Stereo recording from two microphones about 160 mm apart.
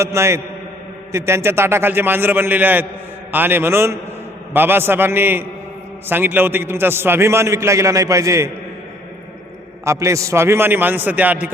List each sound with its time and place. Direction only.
0.0 s a man's voice: 15° right (ahead or behind)
9.8 s a man's voice: 20° right (ahead or behind)